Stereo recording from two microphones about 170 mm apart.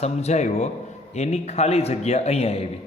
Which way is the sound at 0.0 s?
40° left (ahead or behind).